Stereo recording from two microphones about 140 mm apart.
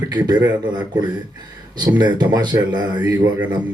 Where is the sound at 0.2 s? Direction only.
30° right (ahead or behind).